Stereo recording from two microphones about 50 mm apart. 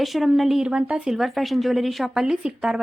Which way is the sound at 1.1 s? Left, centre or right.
Centre.